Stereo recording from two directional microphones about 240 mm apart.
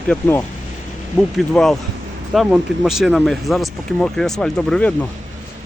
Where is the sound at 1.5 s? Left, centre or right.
Centre.